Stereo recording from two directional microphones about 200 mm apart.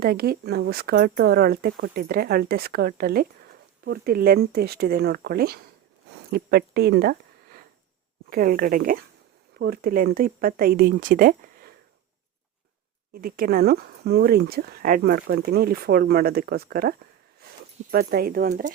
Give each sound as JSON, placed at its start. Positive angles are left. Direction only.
{"t": 0.0, "sound": "speech", "side_deg": -50}
{"t": 8.3, "sound": "speech", "side_deg": -45}
{"t": 13.1, "sound": "speech", "side_deg": -45}
{"t": 17.9, "sound": "speech", "side_deg": -50}